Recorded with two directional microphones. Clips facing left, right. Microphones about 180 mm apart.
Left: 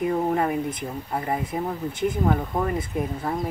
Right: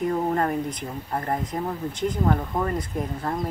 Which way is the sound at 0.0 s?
5° left (ahead or behind).